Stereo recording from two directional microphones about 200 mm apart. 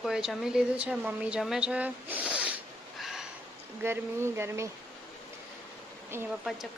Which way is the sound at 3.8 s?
10° right (ahead or behind).